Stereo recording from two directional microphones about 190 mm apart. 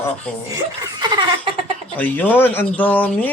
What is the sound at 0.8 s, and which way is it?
Laughter, 20° right (ahead or behind).